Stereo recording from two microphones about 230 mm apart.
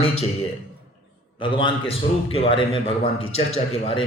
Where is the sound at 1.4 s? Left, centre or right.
Left.